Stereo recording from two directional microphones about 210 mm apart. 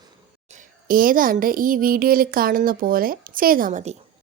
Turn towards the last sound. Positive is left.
turn(degrees=-35)  # may be behind; listen again after turning